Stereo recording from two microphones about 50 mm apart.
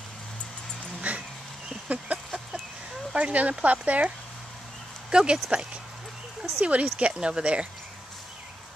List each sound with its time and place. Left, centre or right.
1.1 s dog: right
1.9 s a sound: right
3.2 s speech: right
5.1 s speech: right